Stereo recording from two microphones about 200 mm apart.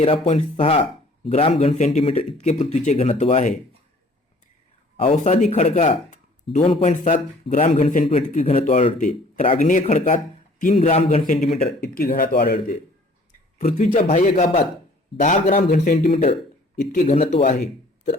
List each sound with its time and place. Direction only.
0.0 s speech: 30° left (ahead or behind)
4.9 s speech: 30° left (ahead or behind)
9.0 s speech: 40° left (ahead or behind)
11.2 s speech: 45° left (ahead or behind)
16.0 s speech: 30° left (ahead or behind)